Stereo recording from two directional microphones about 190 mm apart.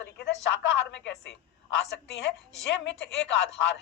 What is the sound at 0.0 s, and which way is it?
A woman's voice, 70° left (ahead or behind).